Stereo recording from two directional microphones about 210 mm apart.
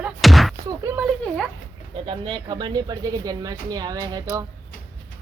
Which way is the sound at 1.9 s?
25° right (ahead or behind).